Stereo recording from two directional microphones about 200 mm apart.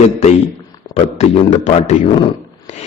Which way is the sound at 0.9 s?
30° left (ahead or behind).